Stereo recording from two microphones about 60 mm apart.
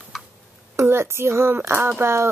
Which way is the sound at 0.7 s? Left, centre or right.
Right.